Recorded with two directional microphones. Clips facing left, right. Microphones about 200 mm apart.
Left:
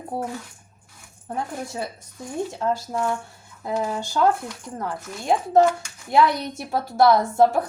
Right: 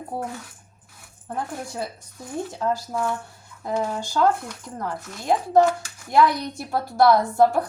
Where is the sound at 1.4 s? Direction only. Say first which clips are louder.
Left 1 dB; centre (ahead or behind).